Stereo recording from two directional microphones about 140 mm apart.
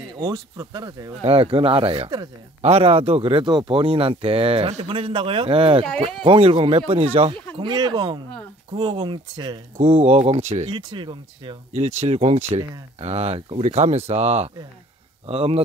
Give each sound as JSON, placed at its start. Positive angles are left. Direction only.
{"t": 0.2, "sound": "speech", "side_deg": -25}
{"t": 1.2, "sound": "speech", "side_deg": -40}
{"t": 7.5, "sound": "speech", "side_deg": -30}
{"t": 10.7, "sound": "speech", "side_deg": -35}
{"t": 11.7, "sound": "speech", "side_deg": -55}